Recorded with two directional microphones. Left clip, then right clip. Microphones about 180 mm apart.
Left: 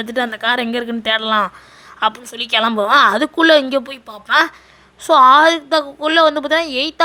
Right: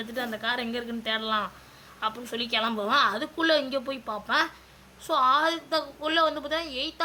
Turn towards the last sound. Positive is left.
turn(degrees=40)  # may be behind; listen again after turning